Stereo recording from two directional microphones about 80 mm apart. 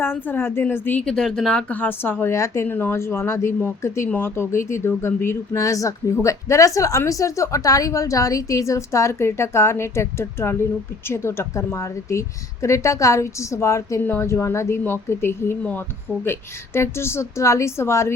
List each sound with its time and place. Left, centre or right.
0.0 s a woman's voice: left
1.0 s speech: centre
1.7 s a woman's voice: left
2.3 s a woman's voice: left
2.6 s a woman's voice: left